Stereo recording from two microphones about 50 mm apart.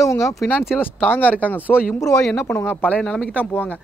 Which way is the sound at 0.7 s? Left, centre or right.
Left.